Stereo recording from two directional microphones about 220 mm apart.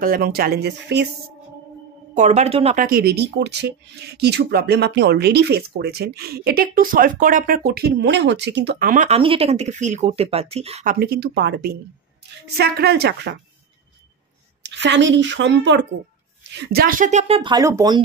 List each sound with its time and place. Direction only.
0.0 s speech: 40° right (ahead or behind)
2.1 s speech: 30° right (ahead or behind)
10.9 s speech: 45° right (ahead or behind)
14.6 s speech: 55° right (ahead or behind); by 18.0 s 15° right (ahead or behind)